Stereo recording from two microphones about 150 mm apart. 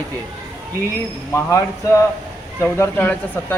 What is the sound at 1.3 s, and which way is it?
Speech, 20° left (ahead or behind).